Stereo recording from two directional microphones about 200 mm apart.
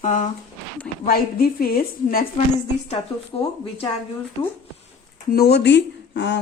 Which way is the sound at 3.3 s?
20° left (ahead or behind).